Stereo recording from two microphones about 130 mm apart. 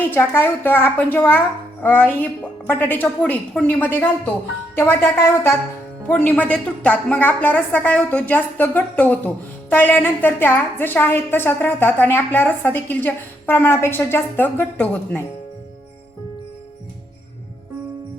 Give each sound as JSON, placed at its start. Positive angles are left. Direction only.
{"t": 0.0, "sound": "a woman's voice", "side_deg": 15}